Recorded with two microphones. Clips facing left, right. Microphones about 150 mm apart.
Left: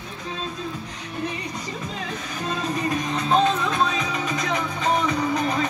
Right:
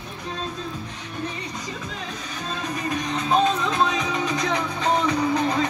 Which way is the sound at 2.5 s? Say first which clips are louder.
Left 3 dB; 15° left (ahead or behind).